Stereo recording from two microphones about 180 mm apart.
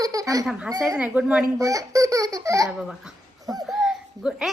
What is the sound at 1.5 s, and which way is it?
Speech, 20° right (ahead or behind).